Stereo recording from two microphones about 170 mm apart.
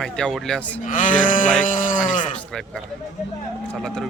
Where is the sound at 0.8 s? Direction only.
50° left (ahead or behind).